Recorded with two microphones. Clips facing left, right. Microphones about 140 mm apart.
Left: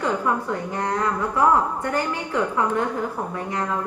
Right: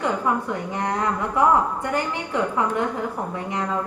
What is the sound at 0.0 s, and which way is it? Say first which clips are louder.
A woman's voice: even; 20° right (ahead or behind).